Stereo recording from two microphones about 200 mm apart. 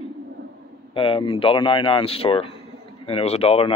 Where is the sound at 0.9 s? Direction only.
25° left (ahead or behind).